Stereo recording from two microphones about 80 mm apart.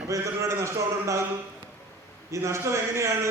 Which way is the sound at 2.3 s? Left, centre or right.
Right.